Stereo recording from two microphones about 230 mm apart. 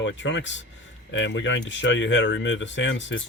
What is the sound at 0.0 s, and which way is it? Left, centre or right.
Speech, left.